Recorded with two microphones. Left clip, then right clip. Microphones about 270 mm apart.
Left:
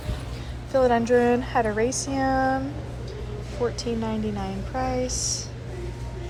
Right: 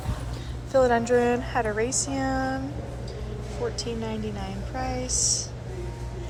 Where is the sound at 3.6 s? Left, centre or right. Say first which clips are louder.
Left 4 dB; centre.